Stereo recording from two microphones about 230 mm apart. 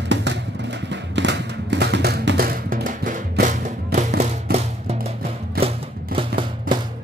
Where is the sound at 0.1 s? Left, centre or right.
Right.